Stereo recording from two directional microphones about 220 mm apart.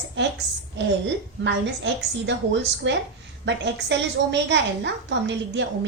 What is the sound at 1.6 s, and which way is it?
A woman's voice, 55° right (ahead or behind).